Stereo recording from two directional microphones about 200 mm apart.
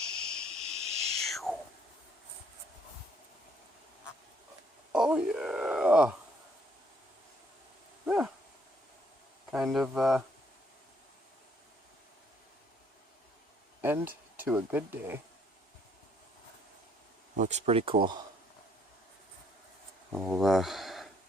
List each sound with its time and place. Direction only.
0.2 s a sound: 5° left (ahead or behind)
0.9 s owl: 30° right (ahead or behind)
1.2 s owl: centre (ahead or behind)
4.9 s a sound: 5° right (ahead or behind)
8.0 s a sound: 5° right (ahead or behind)
9.5 s speech: centre (ahead or behind)
13.8 s speech: 10° right (ahead or behind)
17.3 s speech: 35° right (ahead or behind)
20.1 s speech: centre (ahead or behind)